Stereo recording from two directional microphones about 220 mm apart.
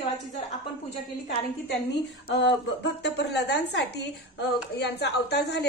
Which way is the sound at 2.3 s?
50° left (ahead or behind).